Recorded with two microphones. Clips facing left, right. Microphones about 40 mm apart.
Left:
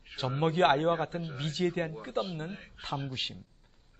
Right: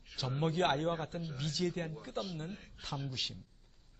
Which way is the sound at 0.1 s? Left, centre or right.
Left.